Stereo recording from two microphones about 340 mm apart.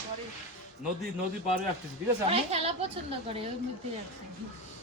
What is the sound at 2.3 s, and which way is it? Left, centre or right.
Speech, centre.